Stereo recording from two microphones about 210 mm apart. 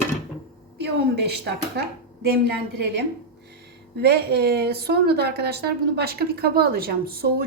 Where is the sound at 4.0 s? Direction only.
50° right (ahead or behind).